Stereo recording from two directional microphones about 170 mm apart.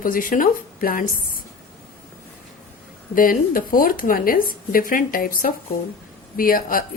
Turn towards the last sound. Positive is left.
turn(degrees=55)  # may be behind; listen again after turning